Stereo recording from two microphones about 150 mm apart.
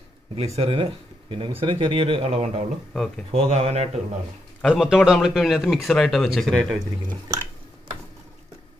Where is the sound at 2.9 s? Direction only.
5° left (ahead or behind).